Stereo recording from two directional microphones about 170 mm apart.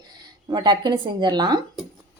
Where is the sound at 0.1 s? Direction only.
25° right (ahead or behind).